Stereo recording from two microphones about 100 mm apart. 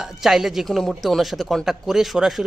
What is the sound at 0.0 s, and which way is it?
Speech, 5° right (ahead or behind).